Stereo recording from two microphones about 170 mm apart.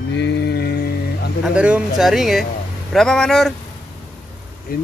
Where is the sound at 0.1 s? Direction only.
90° left; by 1.3 s 70° left (ahead or behind).